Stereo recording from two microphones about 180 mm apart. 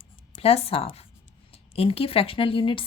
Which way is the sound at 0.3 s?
35° left (ahead or behind).